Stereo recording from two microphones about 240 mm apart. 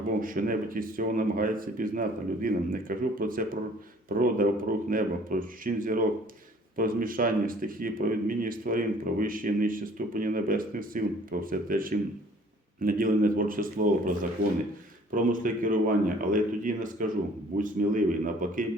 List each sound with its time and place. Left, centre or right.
0.2 s speech: right